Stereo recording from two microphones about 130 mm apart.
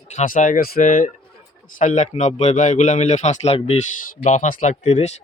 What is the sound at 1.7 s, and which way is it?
A man's voice, 70° left (ahead or behind).